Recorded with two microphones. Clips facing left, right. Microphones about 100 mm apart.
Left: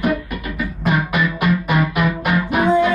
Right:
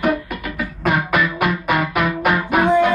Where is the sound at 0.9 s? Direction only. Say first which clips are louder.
Right 1 dB; 50° right (ahead or behind).